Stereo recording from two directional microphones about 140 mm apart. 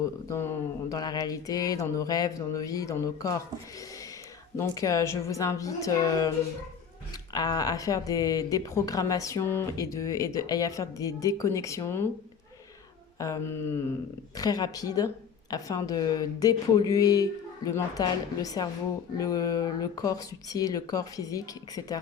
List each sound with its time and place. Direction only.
0.0 s speech: 20° left (ahead or behind)
4.5 s speech: 20° left (ahead or behind)
7.3 s speech: 30° left (ahead or behind)
13.1 s speech: 25° left (ahead or behind)
14.3 s speech: 25° left (ahead or behind)